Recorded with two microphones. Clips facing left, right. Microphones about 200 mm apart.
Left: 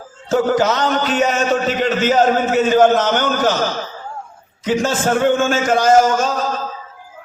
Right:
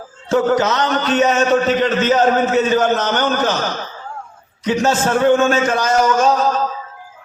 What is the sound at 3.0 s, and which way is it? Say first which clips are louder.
Speech: left 1 dB; 40° right (ahead or behind).